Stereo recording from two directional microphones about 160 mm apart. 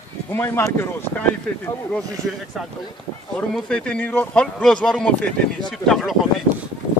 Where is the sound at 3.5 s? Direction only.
5° left (ahead or behind).